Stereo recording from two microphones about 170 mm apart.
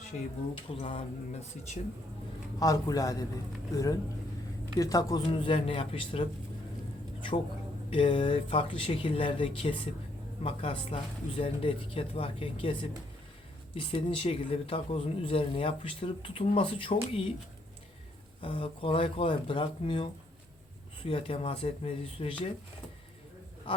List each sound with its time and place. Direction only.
0.1 s a man's voice: 45° left (ahead or behind)
2.6 s a man's voice: 20° left (ahead or behind)
4.8 s a man's voice: 20° left (ahead or behind)
7.9 s a man's voice: 30° left (ahead or behind)
13.7 s a man's voice: 35° left (ahead or behind)
18.4 s a man's voice: 30° left (ahead or behind)